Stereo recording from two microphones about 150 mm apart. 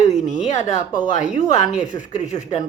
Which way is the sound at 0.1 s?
50° left (ahead or behind).